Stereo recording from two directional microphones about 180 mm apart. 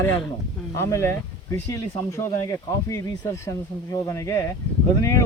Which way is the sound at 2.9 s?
15° left (ahead or behind).